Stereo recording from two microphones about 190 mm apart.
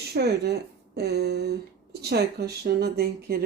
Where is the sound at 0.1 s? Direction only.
60° right (ahead or behind).